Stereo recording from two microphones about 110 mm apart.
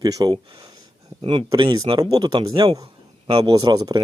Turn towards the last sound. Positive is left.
turn(degrees=-35)  # may be behind; listen again after turning